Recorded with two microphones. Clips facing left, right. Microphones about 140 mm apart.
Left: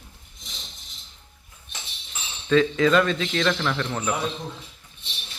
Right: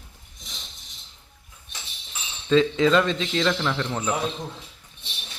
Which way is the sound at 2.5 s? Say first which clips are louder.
Even; 20° right (ahead or behind).